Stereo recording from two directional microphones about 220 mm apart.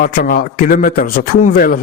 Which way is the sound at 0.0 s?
40° left (ahead or behind).